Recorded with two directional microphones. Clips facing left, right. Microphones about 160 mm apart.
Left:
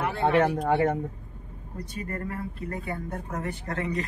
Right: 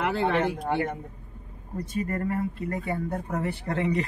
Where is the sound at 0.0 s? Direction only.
90° right.